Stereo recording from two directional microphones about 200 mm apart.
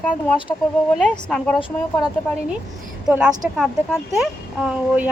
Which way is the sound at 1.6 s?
25° left (ahead or behind).